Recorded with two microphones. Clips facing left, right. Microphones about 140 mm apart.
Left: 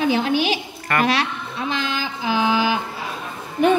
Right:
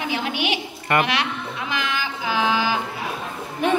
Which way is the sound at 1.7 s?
25° left (ahead or behind).